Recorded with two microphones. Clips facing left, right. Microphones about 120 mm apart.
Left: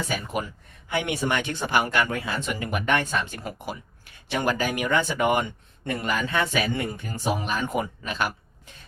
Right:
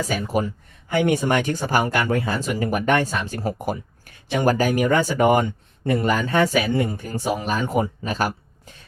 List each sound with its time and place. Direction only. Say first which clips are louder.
0.0 s speech: right 6 dB; 35° right (ahead or behind)